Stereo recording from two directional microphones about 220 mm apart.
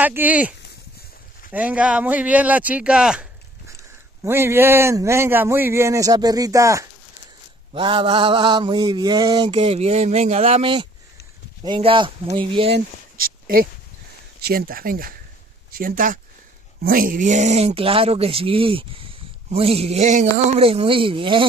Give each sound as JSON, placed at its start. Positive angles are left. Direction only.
{"t": 0.0, "sound": "a man's voice", "side_deg": -10}
{"t": 7.7, "sound": "mantra", "side_deg": -20}
{"t": 12.7, "sound": "a sound", "side_deg": -40}
{"t": 14.4, "sound": "speech", "side_deg": -45}
{"t": 16.8, "sound": "mantra", "side_deg": -40}